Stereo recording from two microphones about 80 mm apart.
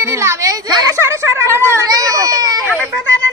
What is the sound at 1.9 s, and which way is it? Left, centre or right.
Speech, right.